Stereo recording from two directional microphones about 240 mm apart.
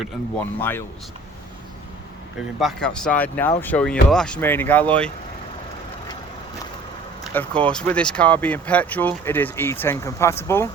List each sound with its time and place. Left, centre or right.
0.3 s speech: centre
2.6 s speech: centre
7.3 s speech: centre